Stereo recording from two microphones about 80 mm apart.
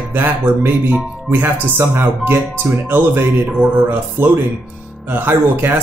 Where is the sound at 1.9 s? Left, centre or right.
Right.